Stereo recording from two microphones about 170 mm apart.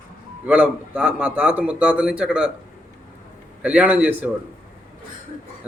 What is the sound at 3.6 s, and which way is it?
Speech, 10° right (ahead or behind).